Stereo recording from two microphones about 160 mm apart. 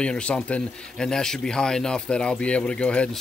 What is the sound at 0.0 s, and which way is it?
Speech, 5° left (ahead or behind).